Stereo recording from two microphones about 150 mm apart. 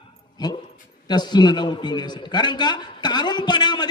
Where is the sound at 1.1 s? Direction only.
30° left (ahead or behind).